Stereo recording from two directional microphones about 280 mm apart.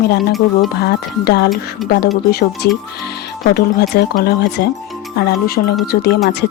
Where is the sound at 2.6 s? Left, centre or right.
Left.